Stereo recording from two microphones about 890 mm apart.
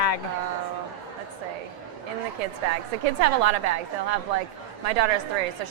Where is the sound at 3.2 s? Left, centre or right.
Right.